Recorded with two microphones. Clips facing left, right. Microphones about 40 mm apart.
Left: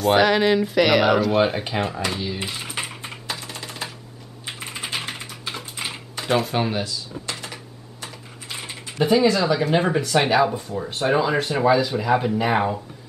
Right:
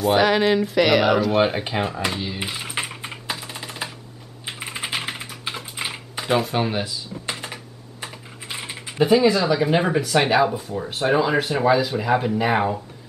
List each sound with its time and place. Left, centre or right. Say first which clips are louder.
0.0 s speech: even; centre
2.0 s typing: even; centre
6.8 s drawer open or close: even; centre
8.0 s speech: right 2 dB; centre